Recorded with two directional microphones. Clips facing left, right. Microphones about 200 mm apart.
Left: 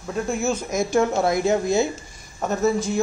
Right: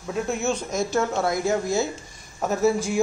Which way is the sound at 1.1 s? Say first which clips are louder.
Left 3 dB; 20° left (ahead or behind).